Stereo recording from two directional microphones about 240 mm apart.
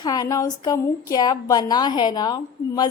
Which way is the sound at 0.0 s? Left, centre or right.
Centre.